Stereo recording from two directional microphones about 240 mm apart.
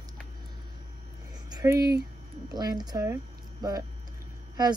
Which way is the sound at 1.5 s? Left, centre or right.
Centre.